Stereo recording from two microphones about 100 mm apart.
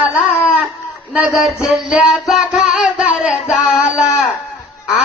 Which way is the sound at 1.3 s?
5° right (ahead or behind).